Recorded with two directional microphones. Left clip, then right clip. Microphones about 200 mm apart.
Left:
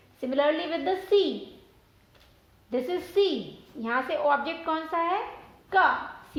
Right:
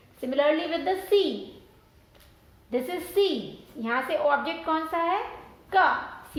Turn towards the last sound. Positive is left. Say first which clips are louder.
# even
turn(degrees=35)  # may be behind; listen again after turning